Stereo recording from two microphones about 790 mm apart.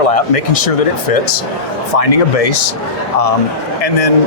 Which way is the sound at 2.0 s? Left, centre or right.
Left.